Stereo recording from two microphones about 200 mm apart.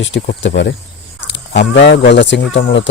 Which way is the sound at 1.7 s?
60° left (ahead or behind).